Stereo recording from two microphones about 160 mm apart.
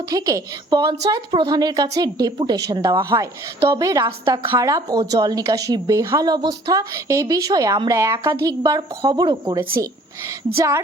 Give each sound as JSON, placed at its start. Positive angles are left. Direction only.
{"t": 0.0, "sound": "a woman's voice", "side_deg": -20}